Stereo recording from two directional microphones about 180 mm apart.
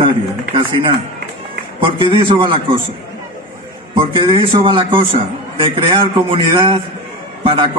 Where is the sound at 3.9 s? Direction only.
25° right (ahead or behind).